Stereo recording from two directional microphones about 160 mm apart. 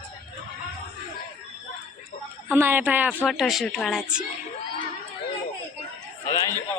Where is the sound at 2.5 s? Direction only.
15° right (ahead or behind).